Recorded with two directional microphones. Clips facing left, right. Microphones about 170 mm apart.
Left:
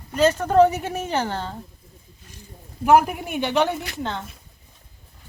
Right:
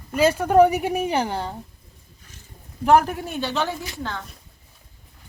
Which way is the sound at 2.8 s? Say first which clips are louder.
Left 1 dB; 10° left (ahead or behind).